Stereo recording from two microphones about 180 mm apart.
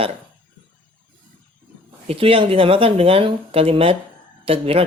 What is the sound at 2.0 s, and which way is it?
Speech, 30° right (ahead or behind).